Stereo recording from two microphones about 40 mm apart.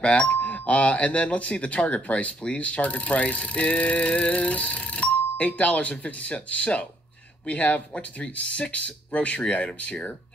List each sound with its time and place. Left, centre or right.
0.0 s speech: left